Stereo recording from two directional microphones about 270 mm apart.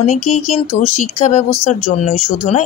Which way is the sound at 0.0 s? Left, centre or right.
Left.